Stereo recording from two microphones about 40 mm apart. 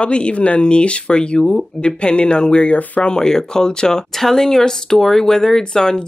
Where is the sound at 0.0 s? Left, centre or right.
Left.